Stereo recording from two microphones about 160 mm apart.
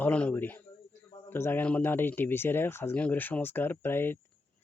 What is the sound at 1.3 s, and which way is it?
Speech, 15° left (ahead or behind).